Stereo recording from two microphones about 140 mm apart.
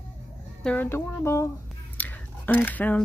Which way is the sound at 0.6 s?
10° left (ahead or behind).